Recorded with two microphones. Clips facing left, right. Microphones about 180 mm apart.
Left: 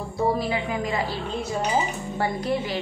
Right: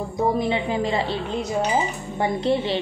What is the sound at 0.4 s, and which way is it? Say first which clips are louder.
A woman's voice: right 4 dB; 25° right (ahead or behind).